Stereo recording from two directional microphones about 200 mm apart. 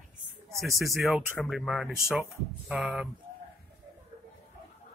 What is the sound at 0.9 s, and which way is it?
Speech, centre (ahead or behind).